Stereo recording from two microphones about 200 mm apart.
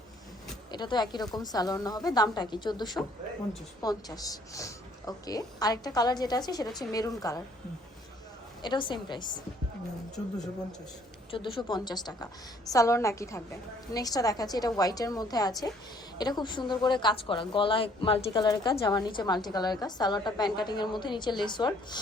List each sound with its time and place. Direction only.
0.7 s a woman's voice: 20° left (ahead or behind)
8.6 s a woman's voice: 25° left (ahead or behind)
11.3 s a woman's voice: 25° left (ahead or behind)